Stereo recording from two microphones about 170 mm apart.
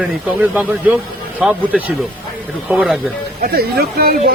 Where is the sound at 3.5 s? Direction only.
65° right (ahead or behind).